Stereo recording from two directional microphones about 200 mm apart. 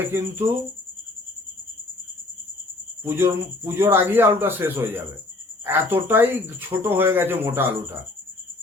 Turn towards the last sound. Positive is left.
turn(degrees=-10)  # may be behind; listen again after turning